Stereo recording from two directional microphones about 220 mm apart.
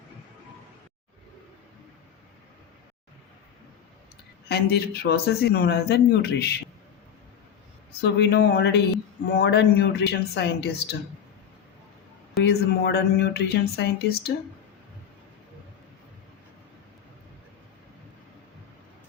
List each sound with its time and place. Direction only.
4.4 s speech: 45° left (ahead or behind)
8.0 s speech: 50° left (ahead or behind)
12.4 s speech: 50° left (ahead or behind)